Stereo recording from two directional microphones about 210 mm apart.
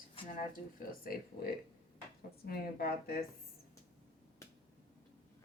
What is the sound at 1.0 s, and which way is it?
Speech, 45° left (ahead or behind).